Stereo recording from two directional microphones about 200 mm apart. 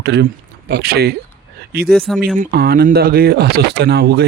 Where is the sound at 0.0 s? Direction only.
55° right (ahead or behind).